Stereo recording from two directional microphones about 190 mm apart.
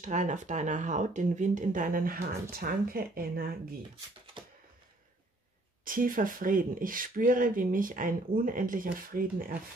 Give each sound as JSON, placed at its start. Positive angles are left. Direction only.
{"t": 0.0, "sound": "speech", "side_deg": -40}
{"t": 4.4, "sound": "typing", "side_deg": -25}
{"t": 5.9, "sound": "speech", "side_deg": -45}